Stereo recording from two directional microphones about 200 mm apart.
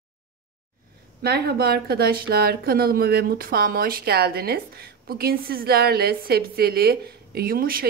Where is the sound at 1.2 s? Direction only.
50° right (ahead or behind).